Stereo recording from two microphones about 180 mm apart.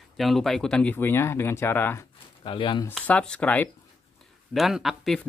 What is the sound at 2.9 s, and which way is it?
Speech, 5° left (ahead or behind).